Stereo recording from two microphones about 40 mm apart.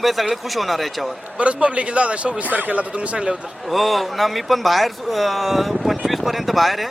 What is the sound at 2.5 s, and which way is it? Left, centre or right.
Speech, right.